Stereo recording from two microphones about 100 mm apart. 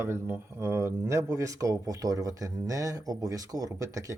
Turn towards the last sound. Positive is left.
turn(degrees=-35)  # may be behind; listen again after turning